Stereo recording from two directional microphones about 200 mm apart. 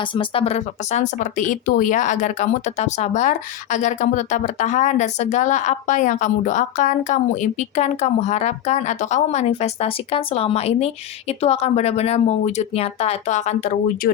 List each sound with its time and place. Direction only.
0.0 s speech: 25° left (ahead or behind); by 14.1 s 40° left (ahead or behind)